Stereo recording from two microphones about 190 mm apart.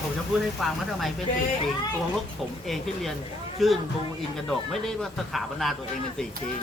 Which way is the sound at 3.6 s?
Centre (ahead or behind).